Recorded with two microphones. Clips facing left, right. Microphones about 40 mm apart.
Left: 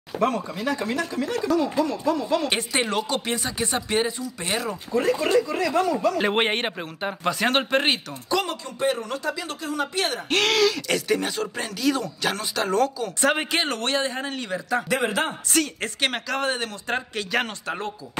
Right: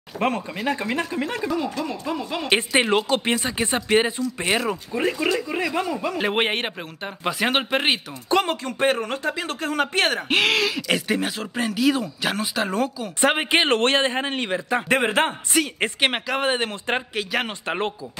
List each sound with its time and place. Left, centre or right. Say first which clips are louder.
0.2 s a man's voice: even; right
1.9 s speech: left 4 dB; centre
6.1 s speech: even; centre
7.2 s speech: right 1 dB; centre
8.3 s a man's voice: right 4 dB; right
8.6 s speech: right 3 dB; right
10.3 s speech: left 3 dB; centre
13.2 s a man's voice: right 4 dB; right
15.8 s speech: right 4 dB; right
17.1 s speech: even; centre
17.6 s speech: right 4 dB; right